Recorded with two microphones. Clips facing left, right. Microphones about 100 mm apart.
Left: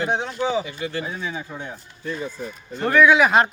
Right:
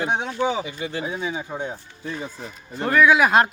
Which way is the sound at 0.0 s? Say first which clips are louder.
Even; 15° right (ahead or behind).